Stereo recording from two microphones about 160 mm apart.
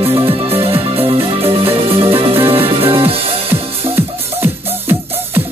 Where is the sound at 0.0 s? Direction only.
35° right (ahead or behind).